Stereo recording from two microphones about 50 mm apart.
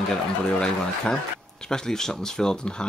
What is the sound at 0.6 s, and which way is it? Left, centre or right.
Speech, centre.